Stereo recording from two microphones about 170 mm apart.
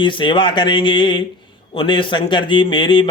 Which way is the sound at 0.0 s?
30° left (ahead or behind).